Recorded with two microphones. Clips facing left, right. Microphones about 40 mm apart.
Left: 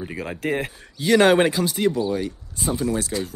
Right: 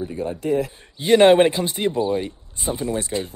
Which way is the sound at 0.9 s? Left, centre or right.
Right.